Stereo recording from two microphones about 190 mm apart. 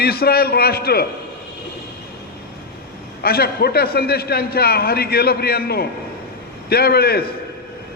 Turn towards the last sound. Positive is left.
turn(degrees=55)  # may be behind; listen again after turning